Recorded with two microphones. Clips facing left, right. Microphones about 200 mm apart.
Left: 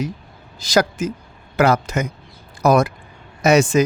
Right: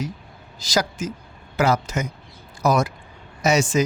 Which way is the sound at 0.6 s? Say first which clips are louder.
Left 6 dB; 55° left (ahead or behind).